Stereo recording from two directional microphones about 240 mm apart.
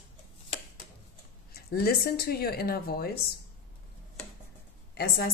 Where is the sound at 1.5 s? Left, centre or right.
Left.